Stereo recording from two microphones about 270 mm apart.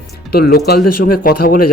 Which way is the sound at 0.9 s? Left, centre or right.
Left.